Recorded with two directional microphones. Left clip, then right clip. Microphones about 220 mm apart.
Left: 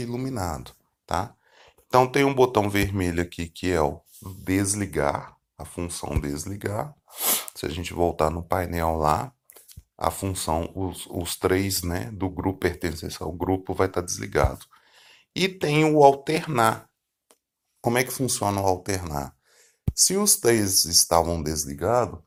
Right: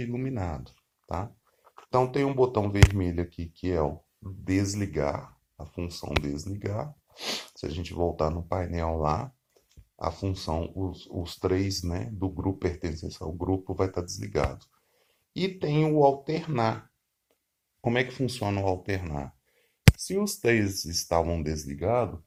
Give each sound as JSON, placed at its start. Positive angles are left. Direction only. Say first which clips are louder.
{"t": 0.0, "sound": "speech", "louder": "left 4 dB", "side_deg": 15}
{"t": 17.8, "sound": "speech", "louder": "left 4 dB", "side_deg": 20}
{"t": 20.7, "sound": "speech", "louder": "left 11 dB", "side_deg": 70}
{"t": 21.1, "sound": "speech", "louder": "left 5 dB", "side_deg": 20}